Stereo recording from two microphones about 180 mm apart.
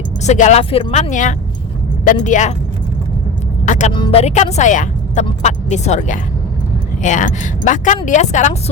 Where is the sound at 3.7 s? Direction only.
40° left (ahead or behind).